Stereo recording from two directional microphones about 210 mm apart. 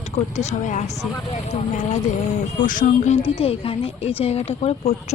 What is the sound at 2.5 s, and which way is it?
A woman's voice, 40° left (ahead or behind).